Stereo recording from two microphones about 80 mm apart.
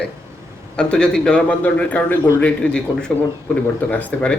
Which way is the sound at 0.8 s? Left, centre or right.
Centre.